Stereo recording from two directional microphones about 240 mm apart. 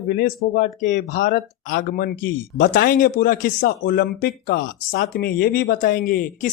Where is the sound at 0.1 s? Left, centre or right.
Left.